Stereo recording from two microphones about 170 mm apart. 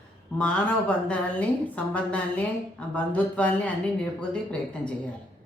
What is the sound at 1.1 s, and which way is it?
Speech, 10° left (ahead or behind).